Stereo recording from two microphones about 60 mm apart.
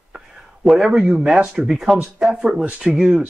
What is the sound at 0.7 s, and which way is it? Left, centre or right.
Speech, centre.